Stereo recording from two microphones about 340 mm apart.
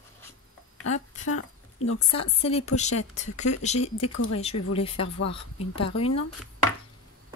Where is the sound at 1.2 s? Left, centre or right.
Left.